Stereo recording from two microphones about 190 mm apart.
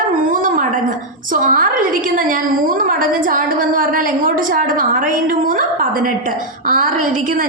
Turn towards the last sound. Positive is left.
turn(degrees=-45)  # may be behind; listen again after turning